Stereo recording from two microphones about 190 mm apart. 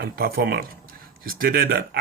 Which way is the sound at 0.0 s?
50° right (ahead or behind).